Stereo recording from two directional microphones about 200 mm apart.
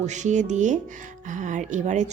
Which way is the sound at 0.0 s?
35° right (ahead or behind).